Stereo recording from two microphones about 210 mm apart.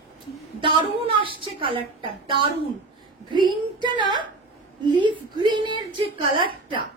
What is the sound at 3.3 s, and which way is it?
A woman's voice, 20° right (ahead or behind).